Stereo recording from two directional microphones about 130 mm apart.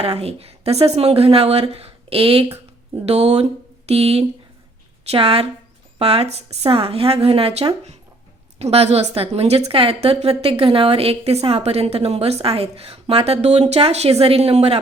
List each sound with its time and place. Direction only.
0.0 s a woman's voice: 50° right (ahead or behind)